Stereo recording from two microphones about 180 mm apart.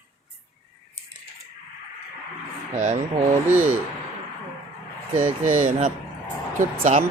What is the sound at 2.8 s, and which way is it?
Speech, 40° right (ahead or behind).